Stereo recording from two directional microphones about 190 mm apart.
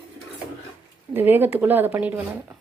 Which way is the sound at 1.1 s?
10° right (ahead or behind).